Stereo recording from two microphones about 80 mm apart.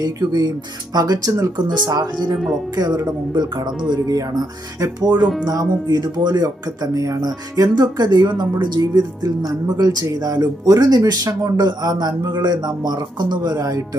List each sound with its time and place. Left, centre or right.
0.0 s speech: right
2.3 s speech: centre
2.7 s speech: right